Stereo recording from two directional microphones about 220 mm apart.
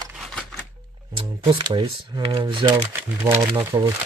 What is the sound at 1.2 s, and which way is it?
Speech, 25° right (ahead or behind).